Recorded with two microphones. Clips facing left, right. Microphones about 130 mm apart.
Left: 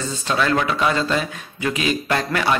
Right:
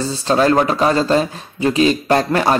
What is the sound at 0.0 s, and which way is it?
Speech, 35° right (ahead or behind).